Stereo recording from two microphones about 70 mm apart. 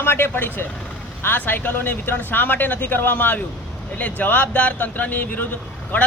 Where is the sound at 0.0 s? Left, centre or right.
Left.